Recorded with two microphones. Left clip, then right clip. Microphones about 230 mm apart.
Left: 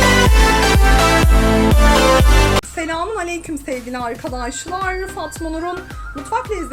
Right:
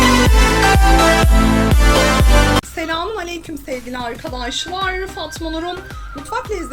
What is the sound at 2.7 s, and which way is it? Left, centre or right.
A woman's voice, centre.